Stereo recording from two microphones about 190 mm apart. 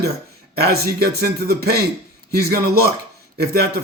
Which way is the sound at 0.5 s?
55° right (ahead or behind).